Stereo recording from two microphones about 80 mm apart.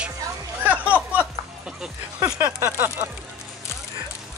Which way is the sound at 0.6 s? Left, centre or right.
Centre.